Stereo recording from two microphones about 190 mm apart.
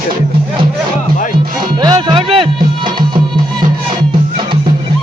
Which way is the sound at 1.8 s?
25° right (ahead or behind).